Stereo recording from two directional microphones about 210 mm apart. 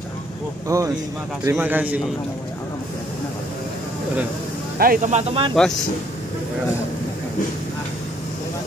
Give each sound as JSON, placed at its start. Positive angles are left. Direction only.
{"t": 0.7, "sound": "a man's voice", "side_deg": -15}
{"t": 4.7, "sound": "speech", "side_deg": -45}
{"t": 5.5, "sound": "speech", "side_deg": 5}